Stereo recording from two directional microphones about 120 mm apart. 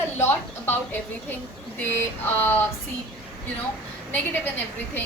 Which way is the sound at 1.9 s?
15° left (ahead or behind).